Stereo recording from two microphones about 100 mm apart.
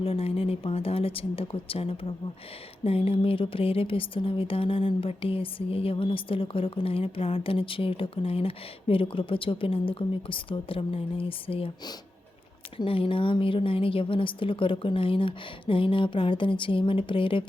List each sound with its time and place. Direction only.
0.0 s speech: 75° left (ahead or behind)
12.7 s speech: 65° left (ahead or behind)